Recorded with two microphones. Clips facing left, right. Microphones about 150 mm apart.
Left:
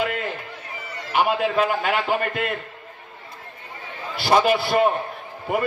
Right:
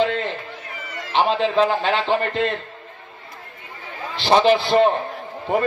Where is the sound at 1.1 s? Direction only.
20° right (ahead or behind).